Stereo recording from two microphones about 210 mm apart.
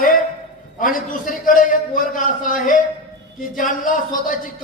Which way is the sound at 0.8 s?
40° left (ahead or behind).